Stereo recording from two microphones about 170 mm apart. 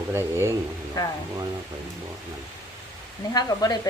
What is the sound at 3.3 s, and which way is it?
Speech, 25° left (ahead or behind).